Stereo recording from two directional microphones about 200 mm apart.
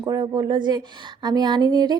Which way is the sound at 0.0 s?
20° right (ahead or behind).